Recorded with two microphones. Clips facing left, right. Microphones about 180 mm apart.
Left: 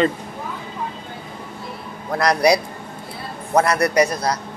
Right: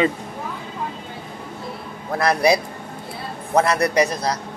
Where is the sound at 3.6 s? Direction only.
20° right (ahead or behind).